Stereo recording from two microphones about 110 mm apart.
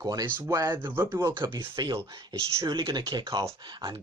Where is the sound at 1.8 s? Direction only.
35° right (ahead or behind).